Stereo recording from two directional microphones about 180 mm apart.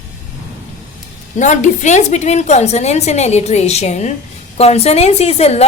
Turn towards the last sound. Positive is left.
turn(degrees=35)  # may be behind; listen again after turning